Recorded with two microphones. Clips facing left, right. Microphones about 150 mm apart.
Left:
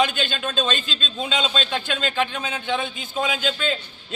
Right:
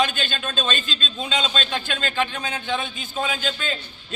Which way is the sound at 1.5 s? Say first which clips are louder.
Left 2 dB; 10° left (ahead or behind).